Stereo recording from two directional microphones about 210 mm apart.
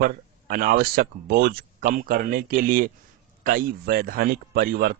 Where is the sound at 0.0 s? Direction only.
45° right (ahead or behind).